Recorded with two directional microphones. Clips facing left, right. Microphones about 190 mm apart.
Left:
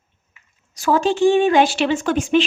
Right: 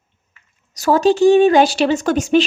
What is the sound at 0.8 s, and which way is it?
A woman's voice, 40° right (ahead or behind).